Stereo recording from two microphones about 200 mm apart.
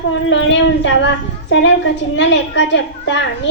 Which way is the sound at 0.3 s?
65° left (ahead or behind).